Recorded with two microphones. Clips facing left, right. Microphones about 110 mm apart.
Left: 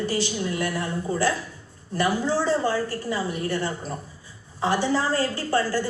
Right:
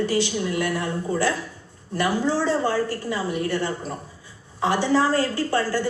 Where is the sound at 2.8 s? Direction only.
35° left (ahead or behind).